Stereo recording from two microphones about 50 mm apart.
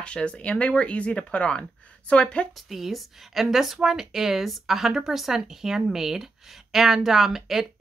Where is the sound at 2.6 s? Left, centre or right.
Centre.